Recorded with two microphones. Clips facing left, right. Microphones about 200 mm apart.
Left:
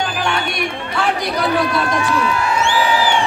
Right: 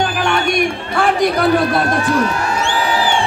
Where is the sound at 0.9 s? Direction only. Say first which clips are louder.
Right 5 dB; 50° right (ahead or behind).